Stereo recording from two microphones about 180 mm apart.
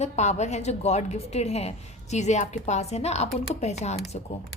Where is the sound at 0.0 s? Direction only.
40° left (ahead or behind).